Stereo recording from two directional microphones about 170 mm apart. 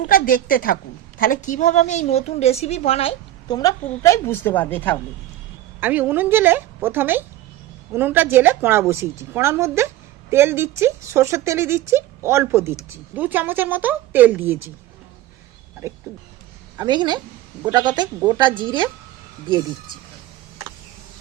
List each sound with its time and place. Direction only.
0.1 s a woman's voice: 55° left (ahead or behind); by 3.2 s 35° left (ahead or behind)
3.5 s a woman's voice: 20° left (ahead or behind)
5.8 s a woman's voice: 10° right (ahead or behind)
16.7 s a woman's voice: 25° right (ahead or behind)